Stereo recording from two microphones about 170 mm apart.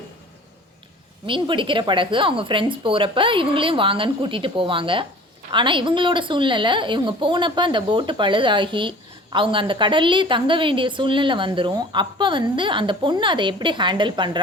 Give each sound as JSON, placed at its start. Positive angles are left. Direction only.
{"t": 1.3, "sound": "a woman's voice", "side_deg": -30}